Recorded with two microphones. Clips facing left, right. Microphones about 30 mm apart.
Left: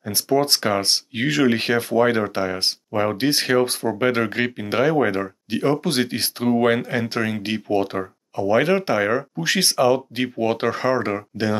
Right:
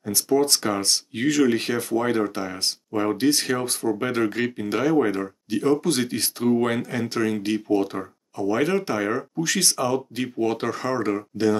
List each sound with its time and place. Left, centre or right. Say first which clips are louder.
0.0 s speech: left 1 dB; left